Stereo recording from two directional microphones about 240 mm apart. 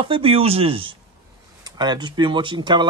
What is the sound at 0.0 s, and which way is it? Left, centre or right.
Speech, right.